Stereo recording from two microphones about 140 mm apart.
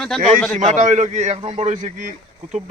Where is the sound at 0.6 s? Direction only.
60° right (ahead or behind).